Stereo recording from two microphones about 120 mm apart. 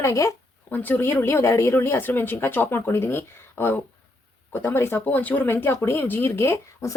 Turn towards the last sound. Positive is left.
turn(degrees=20)  # may be behind; listen again after turning